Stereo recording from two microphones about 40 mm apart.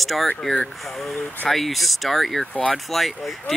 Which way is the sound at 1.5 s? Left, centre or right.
Centre.